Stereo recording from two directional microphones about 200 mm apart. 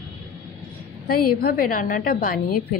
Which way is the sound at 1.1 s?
50° left (ahead or behind).